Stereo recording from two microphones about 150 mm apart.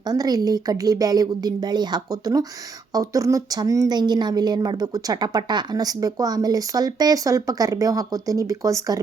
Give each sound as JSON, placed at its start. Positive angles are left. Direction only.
{"t": 0.0, "sound": "a woman's voice", "side_deg": -25}